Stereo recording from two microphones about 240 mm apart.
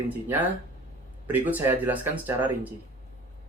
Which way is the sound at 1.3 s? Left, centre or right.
Centre.